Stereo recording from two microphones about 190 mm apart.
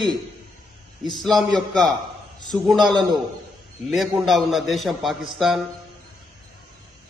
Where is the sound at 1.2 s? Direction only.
Centre (ahead or behind).